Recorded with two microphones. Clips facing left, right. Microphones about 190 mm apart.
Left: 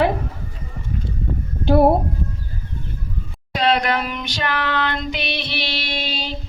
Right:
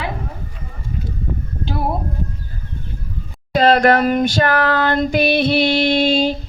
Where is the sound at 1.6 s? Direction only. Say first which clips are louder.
Left 10 dB; 60° left (ahead or behind).